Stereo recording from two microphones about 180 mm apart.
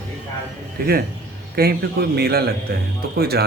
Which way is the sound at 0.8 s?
55° right (ahead or behind).